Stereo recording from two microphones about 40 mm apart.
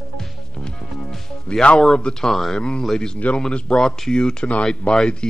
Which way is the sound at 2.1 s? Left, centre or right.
Centre.